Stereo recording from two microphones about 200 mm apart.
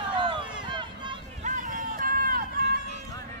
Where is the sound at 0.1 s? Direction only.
25° right (ahead or behind).